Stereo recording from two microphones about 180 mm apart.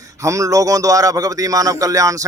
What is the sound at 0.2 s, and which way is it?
Speech, 15° right (ahead or behind).